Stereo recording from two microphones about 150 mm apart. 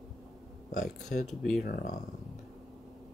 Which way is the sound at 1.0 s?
50° left (ahead or behind).